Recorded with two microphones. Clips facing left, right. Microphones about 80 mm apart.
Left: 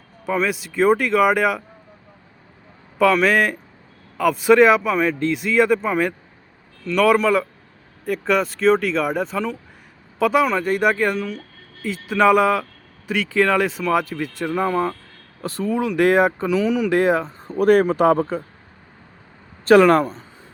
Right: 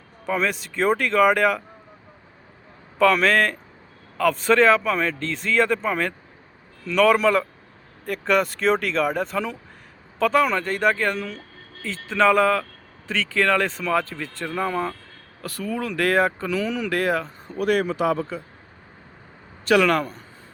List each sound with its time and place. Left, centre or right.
0.3 s speech: centre
3.0 s speech: centre; by 18.4 s left
19.6 s speech: left